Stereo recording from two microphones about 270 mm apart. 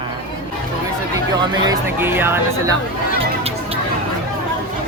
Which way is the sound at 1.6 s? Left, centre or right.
Centre.